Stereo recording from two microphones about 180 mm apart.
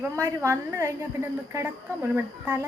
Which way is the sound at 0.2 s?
15° right (ahead or behind).